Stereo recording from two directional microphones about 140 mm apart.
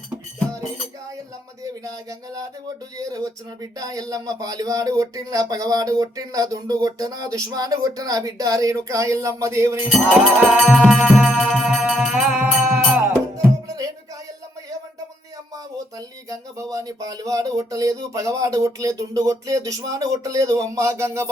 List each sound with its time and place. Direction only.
1.6 s speech: 25° right (ahead or behind)
10.1 s music: 5° right (ahead or behind)
13.0 s music: 25° right (ahead or behind)
15.5 s speech: 25° right (ahead or behind)